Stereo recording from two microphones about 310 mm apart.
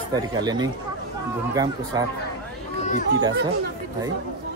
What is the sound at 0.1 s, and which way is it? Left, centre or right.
Speech, centre.